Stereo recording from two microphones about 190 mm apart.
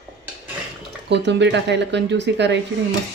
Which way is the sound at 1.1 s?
65° right (ahead or behind).